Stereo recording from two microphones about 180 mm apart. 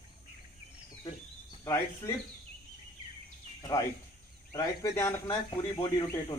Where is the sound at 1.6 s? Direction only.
15° left (ahead or behind).